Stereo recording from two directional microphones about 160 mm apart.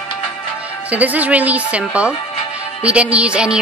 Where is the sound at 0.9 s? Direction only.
10° right (ahead or behind).